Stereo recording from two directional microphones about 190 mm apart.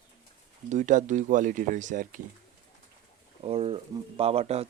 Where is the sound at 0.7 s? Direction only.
40° right (ahead or behind).